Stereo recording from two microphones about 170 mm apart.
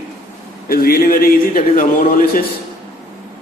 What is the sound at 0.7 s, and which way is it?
A man's voice, 60° left (ahead or behind).